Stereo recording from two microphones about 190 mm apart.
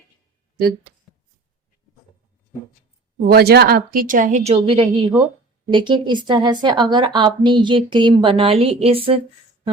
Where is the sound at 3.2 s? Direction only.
55° right (ahead or behind).